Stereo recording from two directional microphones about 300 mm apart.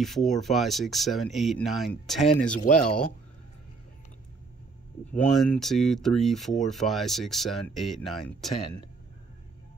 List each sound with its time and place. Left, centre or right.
0.0 s speech: centre
2.5 s speech: left
5.3 s speech: centre